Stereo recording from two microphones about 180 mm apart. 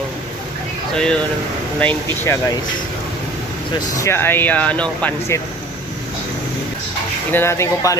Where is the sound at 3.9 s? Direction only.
15° left (ahead or behind).